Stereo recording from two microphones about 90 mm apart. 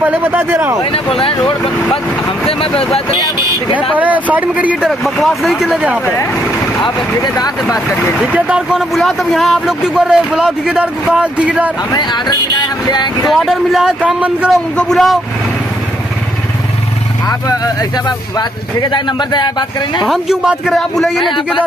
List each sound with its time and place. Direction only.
0.0 s speech: 20° right (ahead or behind)
0.9 s speech: 85° left
3.9 s speech: 15° right (ahead or behind)
5.0 s speech: centre (ahead or behind)
7.2 s speech: 45° left (ahead or behind)
8.2 s speech: 15° right (ahead or behind)
12.0 s speech: 55° left (ahead or behind)
13.3 s speech: centre (ahead or behind)
14.8 s speech: 5° left (ahead or behind)
17.3 s speech: 40° left (ahead or behind)
18.8 s speech: 55° left (ahead or behind)
20.1 s speech: 5° right (ahead or behind)